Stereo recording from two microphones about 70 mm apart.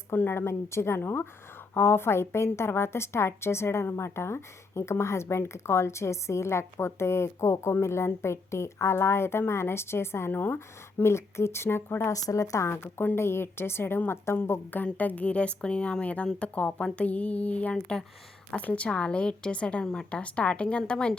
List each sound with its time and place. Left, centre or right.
0.1 s a woman's voice: left
12.1 s a woman's voice: left; by 21.1 s centre